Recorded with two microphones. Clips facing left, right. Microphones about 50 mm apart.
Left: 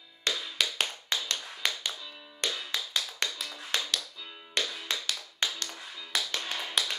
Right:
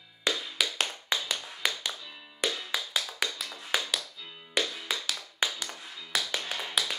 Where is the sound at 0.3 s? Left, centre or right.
Centre.